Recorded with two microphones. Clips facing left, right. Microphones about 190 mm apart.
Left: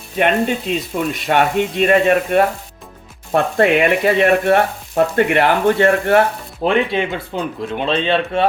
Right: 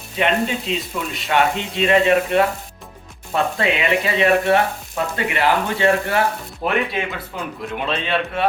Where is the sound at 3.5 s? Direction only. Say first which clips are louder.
Left 9 dB; 50° left (ahead or behind).